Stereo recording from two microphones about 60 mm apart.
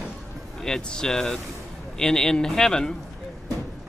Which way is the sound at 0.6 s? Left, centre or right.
Centre.